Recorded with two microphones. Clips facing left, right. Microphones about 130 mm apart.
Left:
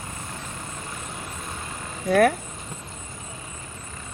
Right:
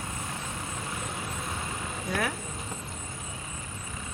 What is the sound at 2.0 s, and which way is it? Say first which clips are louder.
Speech: left 13 dB; 65° left (ahead or behind).